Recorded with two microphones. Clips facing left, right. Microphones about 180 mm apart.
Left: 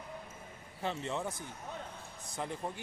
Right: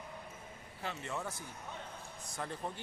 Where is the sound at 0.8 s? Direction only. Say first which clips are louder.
Left 5 dB; 25° left (ahead or behind).